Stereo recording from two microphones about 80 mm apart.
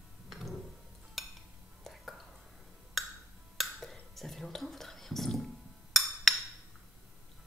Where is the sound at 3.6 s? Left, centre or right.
Centre.